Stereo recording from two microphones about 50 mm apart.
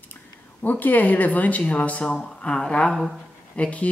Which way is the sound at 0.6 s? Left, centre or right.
Left.